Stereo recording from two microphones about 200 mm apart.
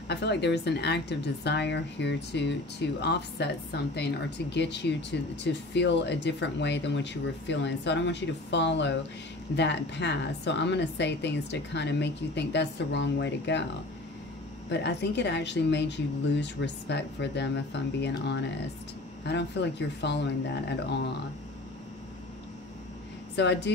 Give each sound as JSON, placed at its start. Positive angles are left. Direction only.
{"t": 0.1, "sound": "a woman's voice", "side_deg": 60}
{"t": 14.7, "sound": "a woman's voice", "side_deg": 60}
{"t": 23.3, "sound": "a woman's voice", "side_deg": 60}